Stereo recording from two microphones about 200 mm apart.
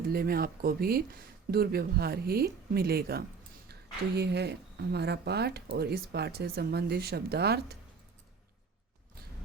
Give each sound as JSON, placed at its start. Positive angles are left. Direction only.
{"t": 0.1, "sound": "speech", "side_deg": -50}